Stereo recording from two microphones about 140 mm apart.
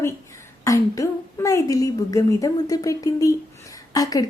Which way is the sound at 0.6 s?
25° left (ahead or behind).